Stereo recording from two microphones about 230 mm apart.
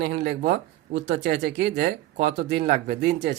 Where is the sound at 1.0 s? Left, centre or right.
Right.